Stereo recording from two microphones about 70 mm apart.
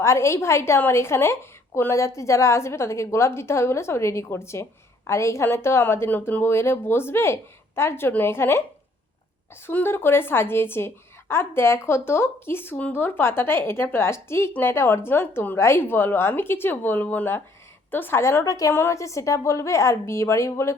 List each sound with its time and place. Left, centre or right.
0.0 s a woman's voice: left
9.6 s a woman's voice: left
18.7 s a woman's voice: left